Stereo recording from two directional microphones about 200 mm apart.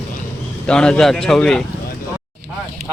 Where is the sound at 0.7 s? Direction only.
5° left (ahead or behind).